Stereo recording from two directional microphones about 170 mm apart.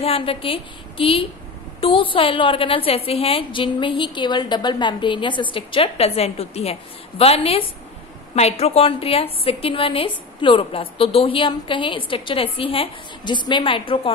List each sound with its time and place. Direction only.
0.0 s a woman's voice: 35° left (ahead or behind)